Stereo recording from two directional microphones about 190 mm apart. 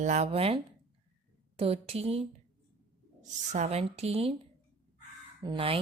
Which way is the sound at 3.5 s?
35° right (ahead or behind).